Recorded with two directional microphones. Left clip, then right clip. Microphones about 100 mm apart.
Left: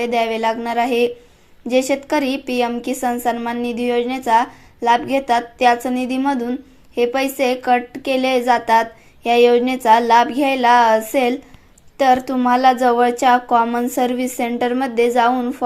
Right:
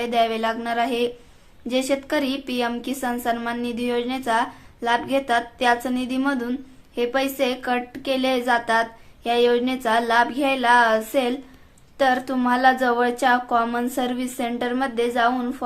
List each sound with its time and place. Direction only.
0.0 s a woman's voice: 30° left (ahead or behind)